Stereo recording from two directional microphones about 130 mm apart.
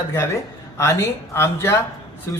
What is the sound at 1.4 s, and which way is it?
Speech, 20° left (ahead or behind).